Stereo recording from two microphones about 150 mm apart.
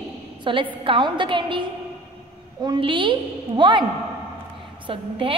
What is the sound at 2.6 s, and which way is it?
A woman's voice, 30° right (ahead or behind).